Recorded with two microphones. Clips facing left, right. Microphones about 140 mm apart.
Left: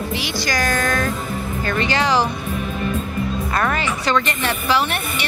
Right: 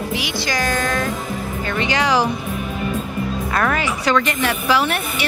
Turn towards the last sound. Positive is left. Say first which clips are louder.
# right 1 dB
turn(degrees=-5)  # may be behind; listen again after turning